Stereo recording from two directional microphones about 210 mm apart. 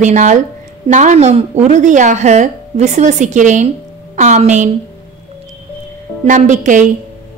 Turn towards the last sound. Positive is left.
turn(degrees=-35)  # may be behind; listen again after turning